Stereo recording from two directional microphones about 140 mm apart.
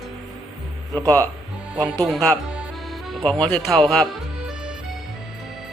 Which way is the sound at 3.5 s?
5° left (ahead or behind).